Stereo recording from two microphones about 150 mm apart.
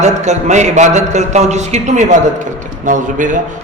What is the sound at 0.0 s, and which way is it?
A man's voice, 50° right (ahead or behind).